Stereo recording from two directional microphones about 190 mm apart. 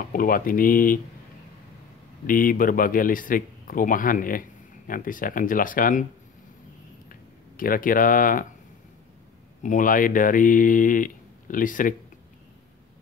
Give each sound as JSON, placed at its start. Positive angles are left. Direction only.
{"t": 0.1, "sound": "speech", "side_deg": 45}
{"t": 2.2, "sound": "speech", "side_deg": 45}
{"t": 7.1, "sound": "a sound", "side_deg": 50}
{"t": 9.6, "sound": "speech", "side_deg": 45}